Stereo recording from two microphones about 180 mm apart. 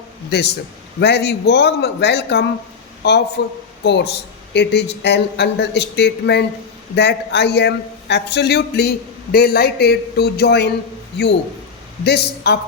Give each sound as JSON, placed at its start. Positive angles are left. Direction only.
{"t": 0.3, "sound": "speech", "side_deg": 65}
{"t": 12.0, "sound": "speech", "side_deg": 65}